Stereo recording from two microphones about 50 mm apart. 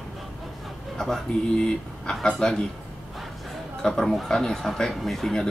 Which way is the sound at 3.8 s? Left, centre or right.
Centre.